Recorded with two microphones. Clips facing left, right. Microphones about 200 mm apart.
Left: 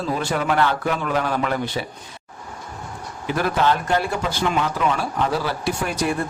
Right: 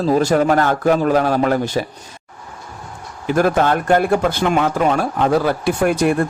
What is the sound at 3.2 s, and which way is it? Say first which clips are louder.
Speech: right 5 dB; 45° right (ahead or behind).